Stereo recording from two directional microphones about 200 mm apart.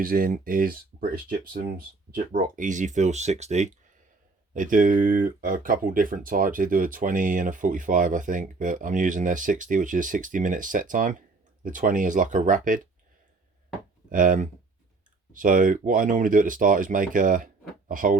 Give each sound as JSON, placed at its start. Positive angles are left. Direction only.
{"t": 0.0, "sound": "speech", "side_deg": -45}
{"t": 14.1, "sound": "speech", "side_deg": -40}